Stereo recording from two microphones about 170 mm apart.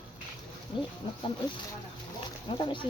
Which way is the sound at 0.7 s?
30° left (ahead or behind).